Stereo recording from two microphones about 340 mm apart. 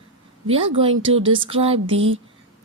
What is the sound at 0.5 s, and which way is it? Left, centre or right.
A woman's voice, centre.